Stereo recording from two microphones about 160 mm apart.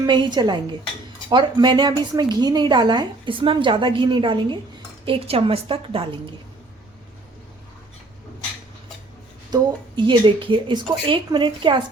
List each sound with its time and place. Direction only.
0.0 s a woman's voice: 30° right (ahead or behind)
9.5 s speech: 30° right (ahead or behind)